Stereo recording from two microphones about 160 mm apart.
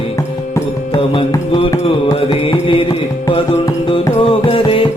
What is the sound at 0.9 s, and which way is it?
Music, 35° left (ahead or behind).